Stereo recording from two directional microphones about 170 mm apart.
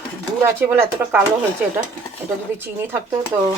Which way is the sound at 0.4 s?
15° right (ahead or behind).